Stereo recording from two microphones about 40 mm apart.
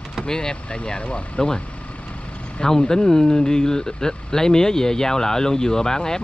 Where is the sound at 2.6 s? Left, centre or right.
Centre.